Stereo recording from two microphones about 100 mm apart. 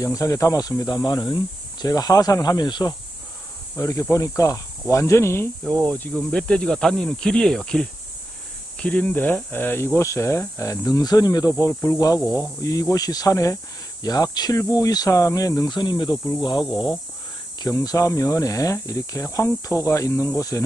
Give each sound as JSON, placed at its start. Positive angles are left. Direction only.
{"t": 0.0, "sound": "speech", "side_deg": 35}
{"t": 3.7, "sound": "speech", "side_deg": 30}
{"t": 5.7, "sound": "speech", "side_deg": 15}
{"t": 16.6, "sound": "speech", "side_deg": -5}
{"t": 17.6, "sound": "speech", "side_deg": 35}